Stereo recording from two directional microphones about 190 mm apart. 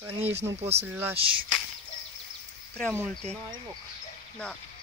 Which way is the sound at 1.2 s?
25° right (ahead or behind).